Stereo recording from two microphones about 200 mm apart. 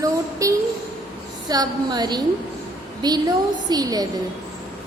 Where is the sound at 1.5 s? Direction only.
20° right (ahead or behind).